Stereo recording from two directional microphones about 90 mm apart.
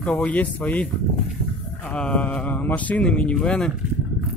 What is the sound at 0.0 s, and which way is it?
Speech, 15° left (ahead or behind).